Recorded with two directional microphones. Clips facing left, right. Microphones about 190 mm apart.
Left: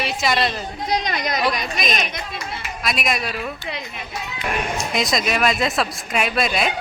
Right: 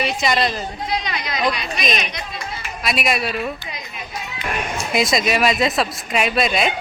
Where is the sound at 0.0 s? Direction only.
Centre (ahead or behind).